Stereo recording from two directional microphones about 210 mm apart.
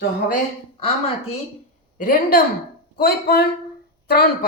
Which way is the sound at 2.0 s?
45° left (ahead or behind).